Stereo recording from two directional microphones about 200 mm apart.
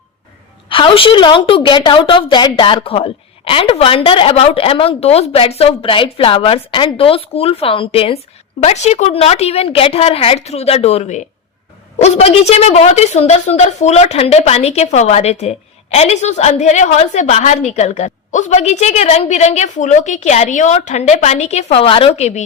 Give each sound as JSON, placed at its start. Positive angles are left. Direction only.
{"t": 0.7, "sound": "a woman's voice", "side_deg": 25}